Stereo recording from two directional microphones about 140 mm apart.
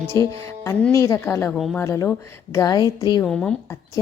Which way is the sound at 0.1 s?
25° left (ahead or behind).